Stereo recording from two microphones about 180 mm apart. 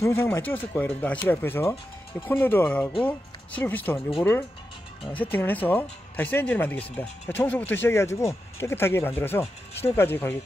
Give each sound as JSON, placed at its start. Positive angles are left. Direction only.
{"t": 0.0, "sound": "speech", "side_deg": 15}